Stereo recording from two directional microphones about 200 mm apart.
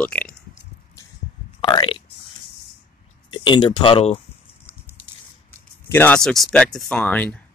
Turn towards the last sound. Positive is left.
turn(degrees=5)  # may be behind; listen again after turning